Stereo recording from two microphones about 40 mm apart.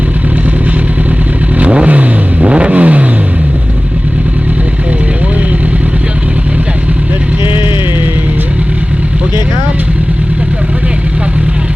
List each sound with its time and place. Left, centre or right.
1.5 s vehicle: right